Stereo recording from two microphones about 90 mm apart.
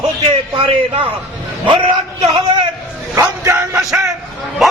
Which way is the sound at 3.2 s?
35° right (ahead or behind).